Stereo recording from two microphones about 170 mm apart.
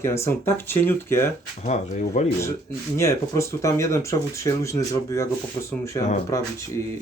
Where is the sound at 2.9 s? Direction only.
15° left (ahead or behind).